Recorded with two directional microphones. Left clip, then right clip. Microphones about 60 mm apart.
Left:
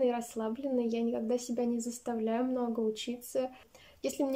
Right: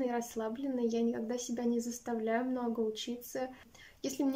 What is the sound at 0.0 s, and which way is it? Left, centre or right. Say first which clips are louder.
Speech: left 4 dB; left.